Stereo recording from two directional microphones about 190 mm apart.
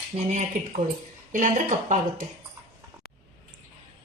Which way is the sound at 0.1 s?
35° right (ahead or behind).